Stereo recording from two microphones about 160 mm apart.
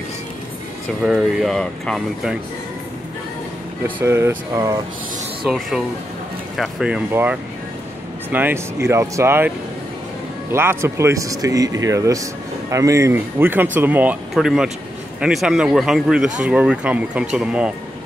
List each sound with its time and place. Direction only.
1.0 s speech: centre (ahead or behind)
3.8 s speech: 15° right (ahead or behind)
5.4 s speech: centre (ahead or behind)
10.5 s speech: 15° right (ahead or behind)